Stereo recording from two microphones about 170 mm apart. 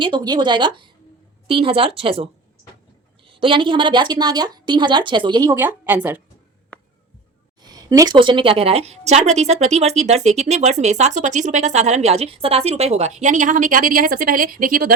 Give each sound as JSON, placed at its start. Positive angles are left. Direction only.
{"t": 0.0, "sound": "a woman's voice", "side_deg": -25}
{"t": 7.6, "sound": "a woman's voice", "side_deg": -20}